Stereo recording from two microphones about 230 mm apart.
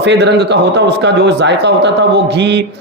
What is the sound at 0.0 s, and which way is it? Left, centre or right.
Speech, right.